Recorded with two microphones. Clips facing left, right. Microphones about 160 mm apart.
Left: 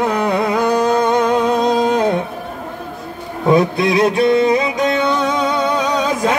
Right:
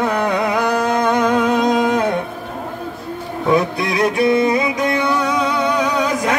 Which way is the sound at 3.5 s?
25° left (ahead or behind).